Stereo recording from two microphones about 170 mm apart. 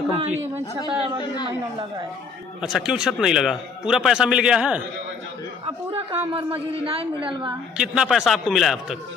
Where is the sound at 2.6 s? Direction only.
5° right (ahead or behind).